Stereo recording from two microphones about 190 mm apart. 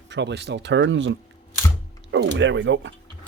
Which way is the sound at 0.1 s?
65° right (ahead or behind).